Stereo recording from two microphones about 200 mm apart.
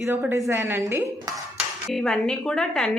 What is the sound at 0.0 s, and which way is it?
A woman's voice, 10° right (ahead or behind).